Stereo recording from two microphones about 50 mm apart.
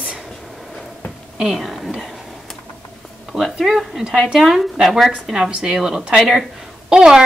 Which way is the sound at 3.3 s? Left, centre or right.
Centre.